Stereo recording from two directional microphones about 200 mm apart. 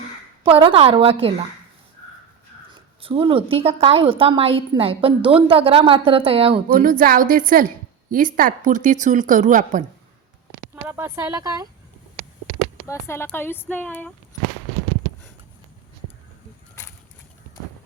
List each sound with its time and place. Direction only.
0.4 s a woman's voice: 25° right (ahead or behind)
2.7 s a woman's voice: 25° right (ahead or behind)
6.7 s a woman's voice: 45° right (ahead or behind)
10.8 s speech: 10° right (ahead or behind)
12.9 s speech: 10° left (ahead or behind)